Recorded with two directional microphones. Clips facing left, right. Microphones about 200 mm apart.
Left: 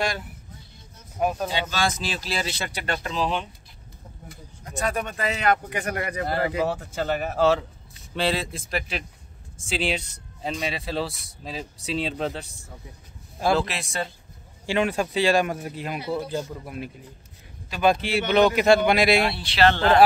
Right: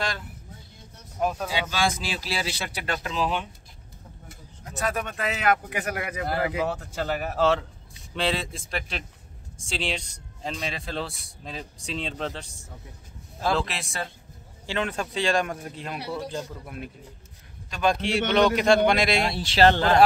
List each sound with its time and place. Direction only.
1.5 s a man's voice: 10° right (ahead or behind)
4.6 s a man's voice: centre (ahead or behind)
13.7 s a man's voice: centre (ahead or behind)
19.2 s speech: 45° right (ahead or behind)